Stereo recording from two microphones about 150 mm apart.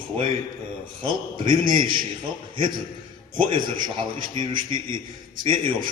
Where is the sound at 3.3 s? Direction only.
35° right (ahead or behind).